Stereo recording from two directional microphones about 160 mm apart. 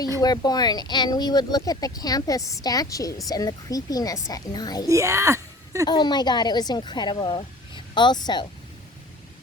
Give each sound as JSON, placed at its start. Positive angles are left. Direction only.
{"t": 0.2, "sound": "speech", "side_deg": 25}
{"t": 4.9, "sound": "speech", "side_deg": -20}
{"t": 5.8, "sound": "speech", "side_deg": 25}